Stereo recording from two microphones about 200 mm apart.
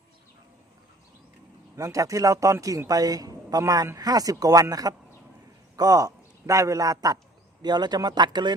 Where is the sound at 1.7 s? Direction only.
15° right (ahead or behind).